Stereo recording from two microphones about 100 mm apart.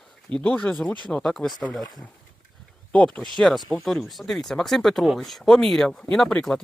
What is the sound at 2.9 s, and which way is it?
A man's voice, 15° left (ahead or behind).